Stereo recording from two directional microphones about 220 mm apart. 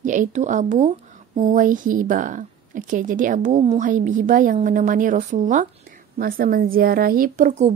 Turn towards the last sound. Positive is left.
turn(degrees=-35)  # may be behind; listen again after turning